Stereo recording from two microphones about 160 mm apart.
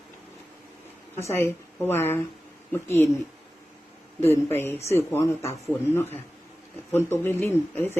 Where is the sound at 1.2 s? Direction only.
15° left (ahead or behind).